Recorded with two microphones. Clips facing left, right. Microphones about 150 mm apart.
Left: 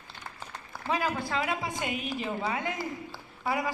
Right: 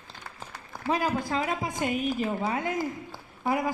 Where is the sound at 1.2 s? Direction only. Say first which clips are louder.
Right 2 dB; 40° right (ahead or behind).